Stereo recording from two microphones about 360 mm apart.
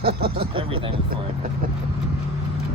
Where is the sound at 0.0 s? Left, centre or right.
Right.